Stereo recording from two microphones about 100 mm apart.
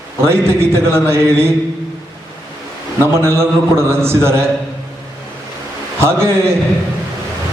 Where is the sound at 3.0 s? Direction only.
25° right (ahead or behind).